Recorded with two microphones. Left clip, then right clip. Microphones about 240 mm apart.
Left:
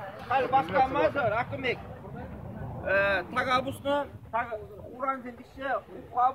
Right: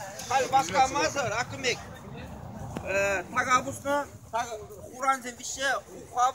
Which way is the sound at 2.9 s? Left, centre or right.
Left.